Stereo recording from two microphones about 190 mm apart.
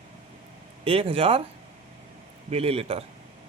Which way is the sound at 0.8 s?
30° right (ahead or behind).